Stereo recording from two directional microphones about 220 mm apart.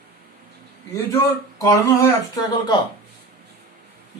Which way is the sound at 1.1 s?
15° left (ahead or behind).